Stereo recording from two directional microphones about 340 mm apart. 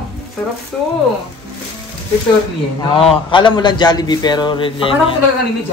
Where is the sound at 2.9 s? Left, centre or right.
Centre.